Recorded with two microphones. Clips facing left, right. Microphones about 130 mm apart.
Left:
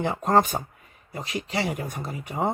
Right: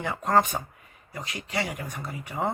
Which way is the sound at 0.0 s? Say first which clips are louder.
Left 2 dB; 25° left (ahead or behind).